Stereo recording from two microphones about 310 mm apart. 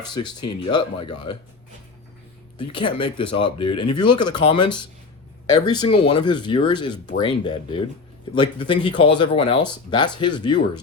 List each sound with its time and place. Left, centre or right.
0.0 s speech: centre
2.6 s speech: centre